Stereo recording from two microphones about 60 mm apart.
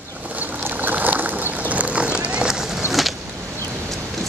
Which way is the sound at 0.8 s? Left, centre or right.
Right.